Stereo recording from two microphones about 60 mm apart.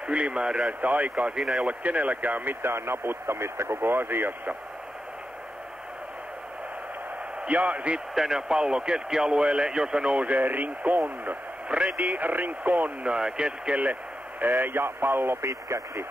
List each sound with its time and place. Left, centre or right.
0.0 s a man's voice: centre
1.4 s speech: centre
1.7 s speech: right
7.4 s a man's voice: right
8.1 s speech: centre
10.4 s a man's voice: right
13.0 s speech: centre
14.4 s speech: right